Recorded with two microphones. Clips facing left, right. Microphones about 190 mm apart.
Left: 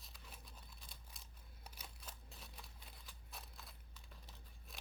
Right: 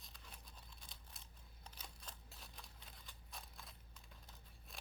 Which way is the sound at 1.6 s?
5° left (ahead or behind).